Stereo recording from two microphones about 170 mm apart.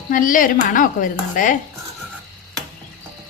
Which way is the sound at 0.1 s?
50° left (ahead or behind).